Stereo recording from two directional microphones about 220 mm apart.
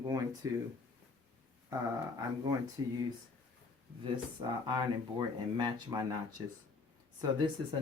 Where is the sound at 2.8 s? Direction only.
15° right (ahead or behind).